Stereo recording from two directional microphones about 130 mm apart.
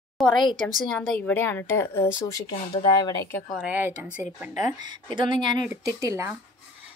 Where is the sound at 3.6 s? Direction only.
10° right (ahead or behind).